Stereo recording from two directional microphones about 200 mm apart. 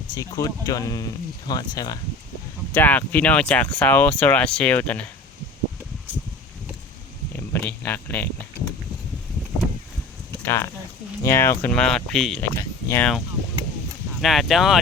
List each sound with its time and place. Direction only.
0.1 s speech: 15° left (ahead or behind)
2.7 s speech: 10° left (ahead or behind)
7.3 s speech: 10° left (ahead or behind)
10.4 s speech: 10° left (ahead or behind)
14.2 s speech: centre (ahead or behind)